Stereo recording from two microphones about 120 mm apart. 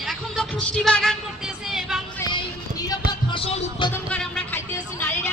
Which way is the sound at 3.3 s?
50° left (ahead or behind).